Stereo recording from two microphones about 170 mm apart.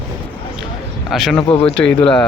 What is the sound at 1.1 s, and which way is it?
Speech, centre (ahead or behind).